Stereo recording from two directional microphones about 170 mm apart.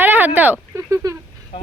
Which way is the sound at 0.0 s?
10° right (ahead or behind).